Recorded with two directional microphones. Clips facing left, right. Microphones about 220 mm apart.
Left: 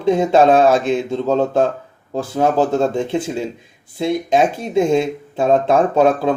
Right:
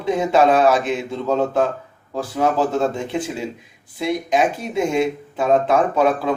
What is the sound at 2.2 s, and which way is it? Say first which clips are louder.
Speech: left 3 dB; 25° left (ahead or behind).